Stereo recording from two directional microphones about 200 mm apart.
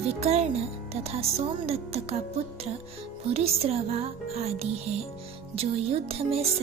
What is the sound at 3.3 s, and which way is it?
Speech, 30° right (ahead or behind).